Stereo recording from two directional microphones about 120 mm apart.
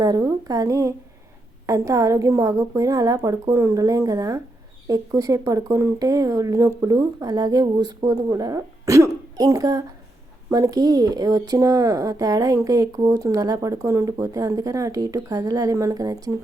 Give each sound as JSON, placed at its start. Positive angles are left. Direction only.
{"t": 0.0, "sound": "speech", "side_deg": -30}